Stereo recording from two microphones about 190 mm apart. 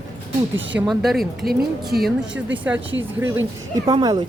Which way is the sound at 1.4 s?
55° right (ahead or behind).